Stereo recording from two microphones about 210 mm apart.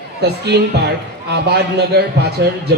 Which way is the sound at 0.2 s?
50° right (ahead or behind).